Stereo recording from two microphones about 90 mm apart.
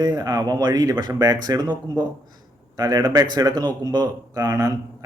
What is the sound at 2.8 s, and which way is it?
A man's voice, 45° right (ahead or behind).